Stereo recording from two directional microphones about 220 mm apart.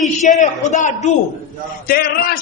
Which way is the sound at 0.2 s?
35° left (ahead or behind).